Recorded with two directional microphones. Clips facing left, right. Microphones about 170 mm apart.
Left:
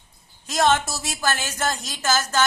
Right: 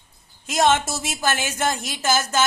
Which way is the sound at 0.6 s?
20° right (ahead or behind).